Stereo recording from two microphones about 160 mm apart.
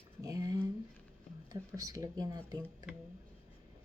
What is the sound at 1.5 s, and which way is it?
Speech, 20° right (ahead or behind).